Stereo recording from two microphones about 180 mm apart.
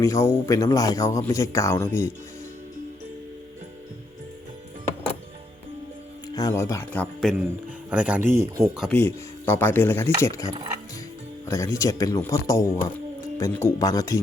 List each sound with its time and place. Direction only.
0.0 s a man's voice: 15° left (ahead or behind)
6.2 s speech: 20° left (ahead or behind); by 8.7 s 15° right (ahead or behind)
8.7 s speech: centre (ahead or behind)
9.0 s a man's voice: 10° left (ahead or behind)